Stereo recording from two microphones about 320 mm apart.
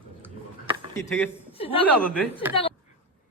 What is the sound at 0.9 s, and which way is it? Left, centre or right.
Speech, centre.